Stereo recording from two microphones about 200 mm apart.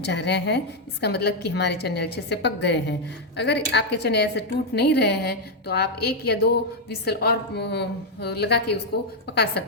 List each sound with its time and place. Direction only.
0.0 s a woman's voice: 60° left (ahead or behind)